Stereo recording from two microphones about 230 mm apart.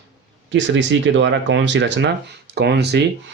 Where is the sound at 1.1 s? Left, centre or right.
Right.